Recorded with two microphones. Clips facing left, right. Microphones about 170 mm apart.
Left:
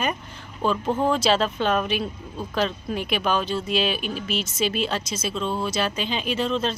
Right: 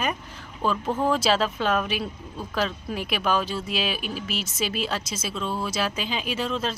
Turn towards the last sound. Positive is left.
turn(degrees=-5)  # may be behind; listen again after turning